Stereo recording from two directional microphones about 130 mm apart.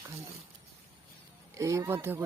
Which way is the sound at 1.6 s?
25° right (ahead or behind).